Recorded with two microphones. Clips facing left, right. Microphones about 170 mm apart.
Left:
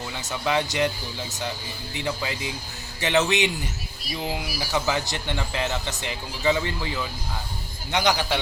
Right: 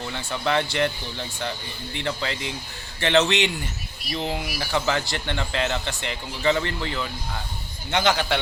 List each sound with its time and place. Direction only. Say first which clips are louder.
0.3 s speech: right 1 dB; 15° left (ahead or behind)
2.0 s speech: even; 10° left (ahead or behind)